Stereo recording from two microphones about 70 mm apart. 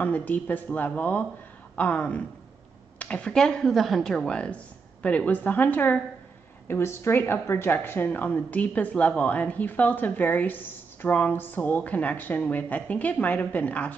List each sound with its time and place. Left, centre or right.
0.0 s a woman's voice: left
6.7 s a woman's voice: left